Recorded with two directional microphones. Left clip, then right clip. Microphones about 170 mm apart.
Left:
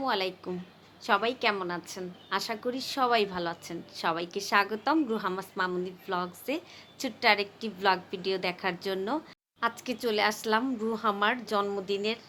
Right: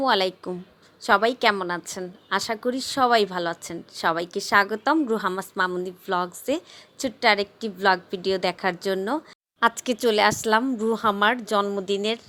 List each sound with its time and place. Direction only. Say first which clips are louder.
0.0 s a woman's voice: right 8 dB; 50° right (ahead or behind)